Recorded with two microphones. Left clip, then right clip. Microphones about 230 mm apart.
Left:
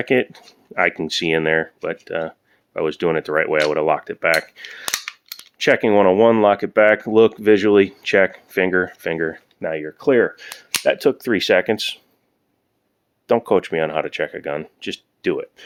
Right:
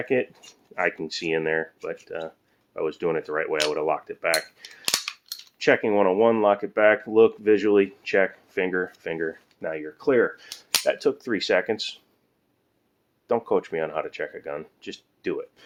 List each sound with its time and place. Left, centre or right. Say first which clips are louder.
0.0 s speech: left 6 dB; left
5.0 s a sound: left 2 dB; centre
5.5 s speech: left 5 dB; left
13.2 s speech: left 7 dB; left